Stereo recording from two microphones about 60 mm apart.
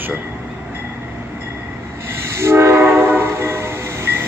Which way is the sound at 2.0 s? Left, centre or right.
Right.